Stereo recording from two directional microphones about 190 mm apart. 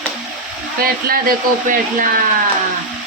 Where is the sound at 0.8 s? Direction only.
50° right (ahead or behind).